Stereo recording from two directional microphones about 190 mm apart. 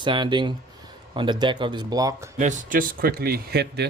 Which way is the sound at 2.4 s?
40° right (ahead or behind).